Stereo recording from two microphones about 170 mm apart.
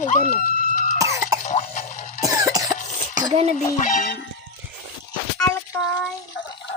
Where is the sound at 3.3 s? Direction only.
40° right (ahead or behind).